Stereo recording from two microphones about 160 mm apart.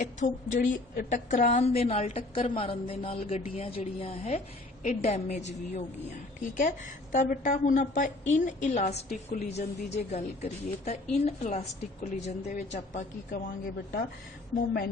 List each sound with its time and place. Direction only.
0.0 s a woman's voice: 50° left (ahead or behind)
9.0 s a woman's voice: 70° left (ahead or behind)
9.5 s a woman's voice: 45° left (ahead or behind); by 14.0 s 60° left (ahead or behind)
14.5 s a woman's voice: 70° left (ahead or behind)